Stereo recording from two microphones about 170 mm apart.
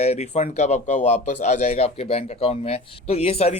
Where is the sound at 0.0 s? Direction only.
40° left (ahead or behind).